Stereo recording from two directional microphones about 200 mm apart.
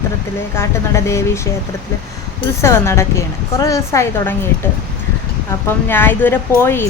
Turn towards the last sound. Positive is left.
turn(degrees=10)  # may be behind; listen again after turning